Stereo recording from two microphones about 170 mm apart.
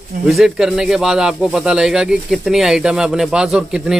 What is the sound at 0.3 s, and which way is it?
Speech, centre (ahead or behind).